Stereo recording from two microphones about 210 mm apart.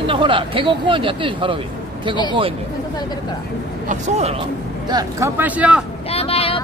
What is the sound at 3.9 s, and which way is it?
Speech, 30° right (ahead or behind).